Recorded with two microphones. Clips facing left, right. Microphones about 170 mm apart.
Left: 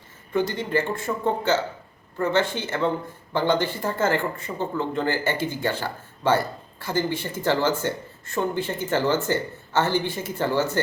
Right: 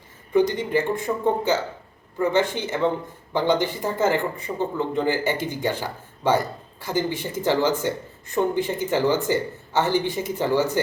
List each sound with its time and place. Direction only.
0.3 s speech: 15° right (ahead or behind)